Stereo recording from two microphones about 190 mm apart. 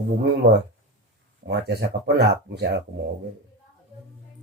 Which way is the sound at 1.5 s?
60° right (ahead or behind).